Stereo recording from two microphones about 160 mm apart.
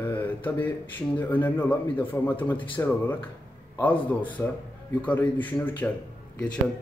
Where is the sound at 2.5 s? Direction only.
30° left (ahead or behind).